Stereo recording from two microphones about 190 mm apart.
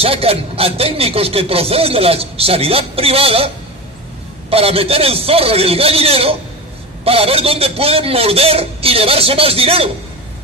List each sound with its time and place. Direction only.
0.0 s speech: 30° right (ahead or behind)